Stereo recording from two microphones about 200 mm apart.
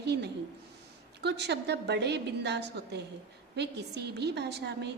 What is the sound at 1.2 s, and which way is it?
A woman's voice, 60° right (ahead or behind).